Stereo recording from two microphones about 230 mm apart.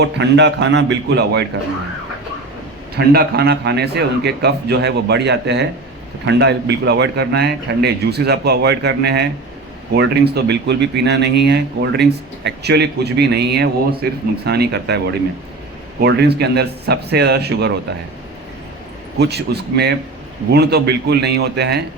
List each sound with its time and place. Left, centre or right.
0.0 s speech: right
2.9 s speech: right
19.2 s speech: right